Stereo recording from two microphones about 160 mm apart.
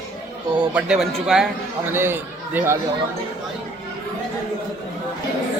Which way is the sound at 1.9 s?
15° right (ahead or behind).